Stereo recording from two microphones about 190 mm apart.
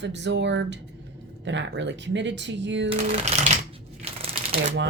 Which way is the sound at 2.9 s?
30° right (ahead or behind).